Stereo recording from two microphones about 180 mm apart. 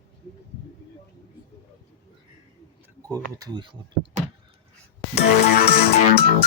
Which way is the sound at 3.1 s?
20° right (ahead or behind).